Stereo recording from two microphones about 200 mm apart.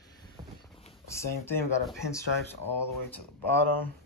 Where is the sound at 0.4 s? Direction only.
20° right (ahead or behind).